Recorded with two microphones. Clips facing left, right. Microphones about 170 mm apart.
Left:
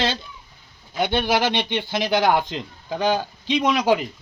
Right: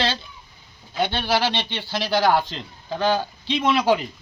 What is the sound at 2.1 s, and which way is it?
A man's voice, 20° left (ahead or behind).